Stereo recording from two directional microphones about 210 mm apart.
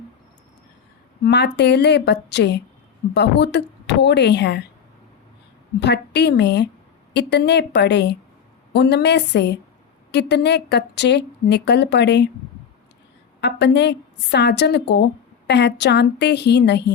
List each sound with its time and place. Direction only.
1.2 s speech: 55° left (ahead or behind)
5.8 s a woman's voice: 55° left (ahead or behind)
13.4 s speech: 55° left (ahead or behind)